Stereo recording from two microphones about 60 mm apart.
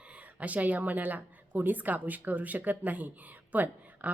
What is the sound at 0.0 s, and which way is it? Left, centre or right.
A woman's voice, centre.